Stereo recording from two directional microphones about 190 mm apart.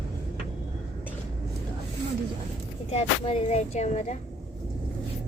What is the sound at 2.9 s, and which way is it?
Speech, 30° left (ahead or behind).